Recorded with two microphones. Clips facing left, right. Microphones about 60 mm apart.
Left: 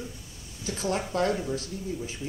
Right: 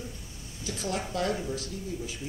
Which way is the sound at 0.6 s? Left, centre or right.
Left.